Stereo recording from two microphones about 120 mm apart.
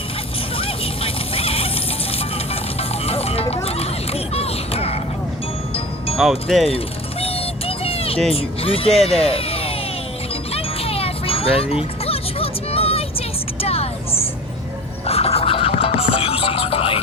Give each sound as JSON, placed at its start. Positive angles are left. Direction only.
{"t": 0.5, "sound": "music", "side_deg": 55}
{"t": 6.1, "sound": "speech", "side_deg": -5}
{"t": 6.7, "sound": "a sound", "side_deg": 55}
{"t": 8.3, "sound": "speech", "side_deg": 55}
{"t": 9.2, "sound": "a sound", "side_deg": 55}
{"t": 10.5, "sound": "music", "side_deg": 55}
{"t": 13.6, "sound": "vehicle", "side_deg": 55}
{"t": 15.0, "sound": "music", "side_deg": 55}